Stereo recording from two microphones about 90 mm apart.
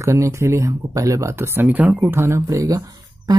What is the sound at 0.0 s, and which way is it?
Speech, 35° right (ahead or behind).